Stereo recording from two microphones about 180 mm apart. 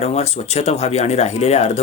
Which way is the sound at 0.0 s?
35° left (ahead or behind).